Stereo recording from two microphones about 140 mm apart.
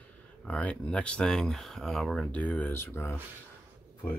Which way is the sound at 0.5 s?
10° left (ahead or behind).